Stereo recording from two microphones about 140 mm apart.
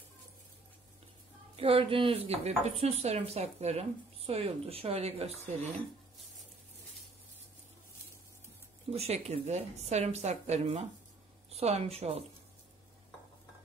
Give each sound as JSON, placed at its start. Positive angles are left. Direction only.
{"t": 1.6, "sound": "speech", "side_deg": -40}
{"t": 8.9, "sound": "speech", "side_deg": -50}